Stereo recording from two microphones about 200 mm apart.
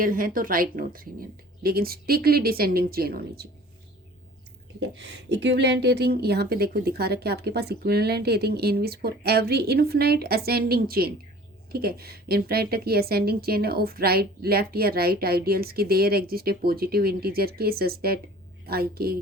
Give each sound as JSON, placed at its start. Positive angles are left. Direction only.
{"t": 0.0, "sound": "a woman's voice", "side_deg": -45}
{"t": 4.8, "sound": "a woman's voice", "side_deg": -60}